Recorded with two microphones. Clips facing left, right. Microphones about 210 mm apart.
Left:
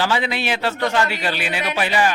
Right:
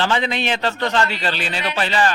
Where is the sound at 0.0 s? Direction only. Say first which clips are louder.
Right 1 dB; 5° left (ahead or behind).